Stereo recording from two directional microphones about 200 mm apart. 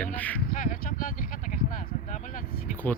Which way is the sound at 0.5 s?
40° left (ahead or behind).